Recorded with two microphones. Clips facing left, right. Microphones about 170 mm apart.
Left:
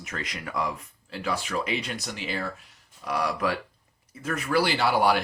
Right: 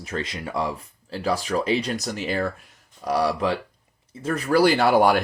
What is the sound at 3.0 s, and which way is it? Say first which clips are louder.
Speech: right 5 dB; 35° right (ahead or behind).